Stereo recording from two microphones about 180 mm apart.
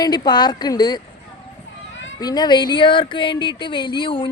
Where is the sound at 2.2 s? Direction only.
25° left (ahead or behind).